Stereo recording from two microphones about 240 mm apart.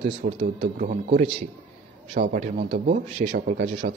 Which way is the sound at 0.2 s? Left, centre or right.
Right.